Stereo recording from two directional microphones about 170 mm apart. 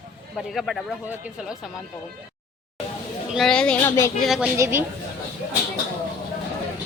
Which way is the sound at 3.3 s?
Centre (ahead or behind).